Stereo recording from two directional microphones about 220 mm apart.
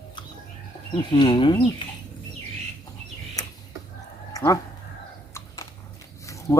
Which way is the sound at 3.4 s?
15° left (ahead or behind).